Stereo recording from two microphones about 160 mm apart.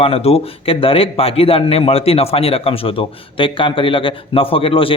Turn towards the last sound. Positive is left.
turn(degrees=35)  # may be behind; listen again after turning